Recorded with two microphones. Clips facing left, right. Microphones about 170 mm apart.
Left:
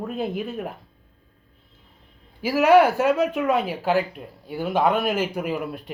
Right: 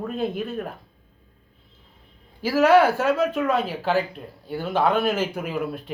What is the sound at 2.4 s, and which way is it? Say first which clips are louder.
Speech: left 1 dB; 15° left (ahead or behind).